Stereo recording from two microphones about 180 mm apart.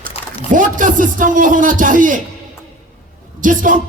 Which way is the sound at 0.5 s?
45° right (ahead or behind).